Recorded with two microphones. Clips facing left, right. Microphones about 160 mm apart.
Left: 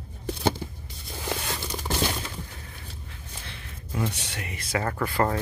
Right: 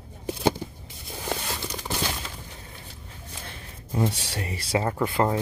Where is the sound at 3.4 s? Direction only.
45° right (ahead or behind).